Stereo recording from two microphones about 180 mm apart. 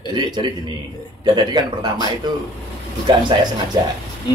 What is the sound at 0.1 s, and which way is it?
A man's voice, 25° right (ahead or behind).